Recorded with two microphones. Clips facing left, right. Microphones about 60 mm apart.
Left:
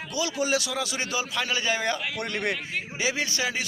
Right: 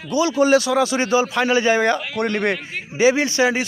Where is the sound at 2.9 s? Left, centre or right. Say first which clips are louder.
Right 13 dB; right.